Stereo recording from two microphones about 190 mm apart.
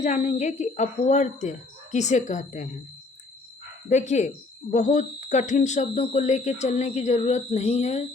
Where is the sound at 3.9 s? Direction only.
40° left (ahead or behind).